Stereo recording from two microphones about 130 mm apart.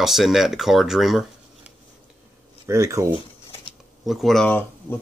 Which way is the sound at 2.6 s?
25° right (ahead or behind).